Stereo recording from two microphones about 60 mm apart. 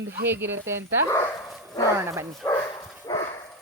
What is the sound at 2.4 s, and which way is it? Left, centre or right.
Speech, left.